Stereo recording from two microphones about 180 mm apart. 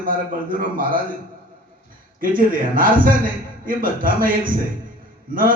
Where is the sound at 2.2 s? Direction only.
50° right (ahead or behind).